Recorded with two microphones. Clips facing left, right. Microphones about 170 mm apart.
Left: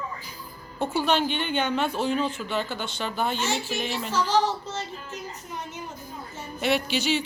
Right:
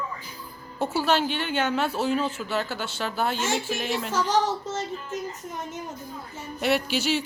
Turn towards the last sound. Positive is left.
turn(degrees=-5)  # may be behind; listen again after turning